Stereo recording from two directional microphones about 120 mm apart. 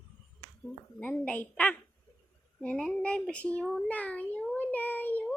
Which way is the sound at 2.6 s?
5° left (ahead or behind).